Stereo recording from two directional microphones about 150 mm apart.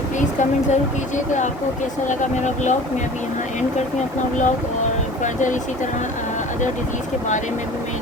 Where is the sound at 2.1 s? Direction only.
55° left (ahead or behind).